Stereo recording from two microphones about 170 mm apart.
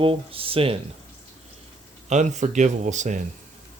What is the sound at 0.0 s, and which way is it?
Speech, 30° right (ahead or behind).